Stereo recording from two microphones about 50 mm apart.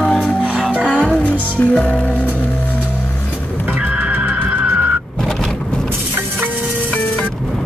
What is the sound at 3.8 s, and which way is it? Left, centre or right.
Music, right.